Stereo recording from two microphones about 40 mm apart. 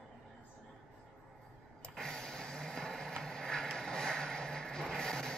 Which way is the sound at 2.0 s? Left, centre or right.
Centre.